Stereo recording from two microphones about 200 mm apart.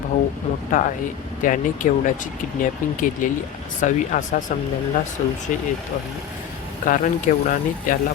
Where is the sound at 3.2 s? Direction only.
40° left (ahead or behind).